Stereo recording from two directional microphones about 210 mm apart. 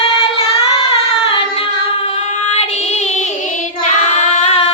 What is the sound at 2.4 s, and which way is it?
Child singing, 30° left (ahead or behind).